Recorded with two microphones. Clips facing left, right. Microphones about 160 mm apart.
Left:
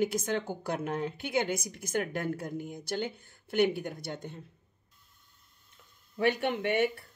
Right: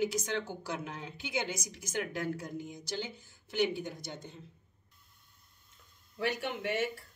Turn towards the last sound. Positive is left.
turn(degrees=60)  # may be behind; listen again after turning